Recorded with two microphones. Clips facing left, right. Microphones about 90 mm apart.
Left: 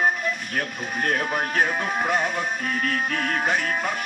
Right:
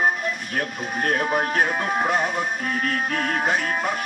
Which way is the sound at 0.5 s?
40° right (ahead or behind).